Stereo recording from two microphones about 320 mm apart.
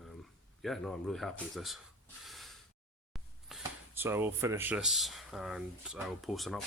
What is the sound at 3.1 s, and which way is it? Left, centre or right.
Speech, centre.